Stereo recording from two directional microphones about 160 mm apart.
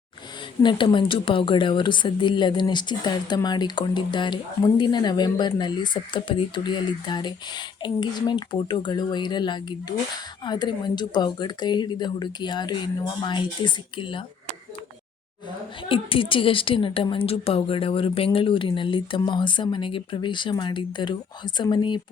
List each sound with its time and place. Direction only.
0.6 s speech: 30° left (ahead or behind)
15.9 s a woman's voice: 35° left (ahead or behind)